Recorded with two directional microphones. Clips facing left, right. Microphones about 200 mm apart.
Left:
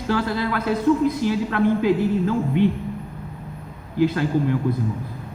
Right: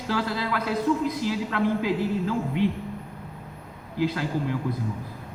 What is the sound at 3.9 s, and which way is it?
Speech, 55° left (ahead or behind).